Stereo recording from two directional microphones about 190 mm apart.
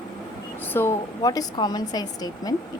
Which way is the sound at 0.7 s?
15° left (ahead or behind).